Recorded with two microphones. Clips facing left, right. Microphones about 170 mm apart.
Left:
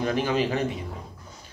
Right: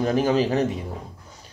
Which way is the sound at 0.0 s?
40° right (ahead or behind).